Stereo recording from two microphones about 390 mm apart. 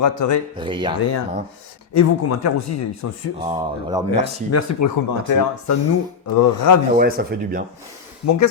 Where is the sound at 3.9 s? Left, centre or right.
Centre.